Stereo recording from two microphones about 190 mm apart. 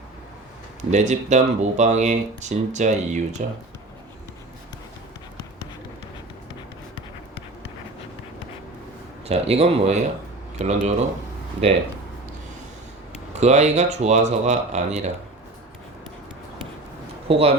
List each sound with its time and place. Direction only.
0.8 s speech: 40° right (ahead or behind)
9.2 s speech: 35° right (ahead or behind)
13.4 s speech: 35° right (ahead or behind)
17.2 s speech: 30° right (ahead or behind)